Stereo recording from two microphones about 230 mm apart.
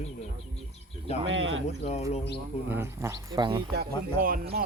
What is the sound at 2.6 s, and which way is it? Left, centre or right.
Speech, centre.